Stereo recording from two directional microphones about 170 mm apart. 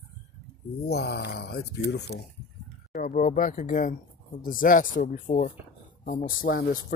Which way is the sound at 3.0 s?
50° left (ahead or behind).